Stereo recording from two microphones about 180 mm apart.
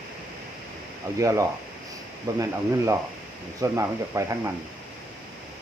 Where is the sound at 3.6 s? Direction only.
15° right (ahead or behind).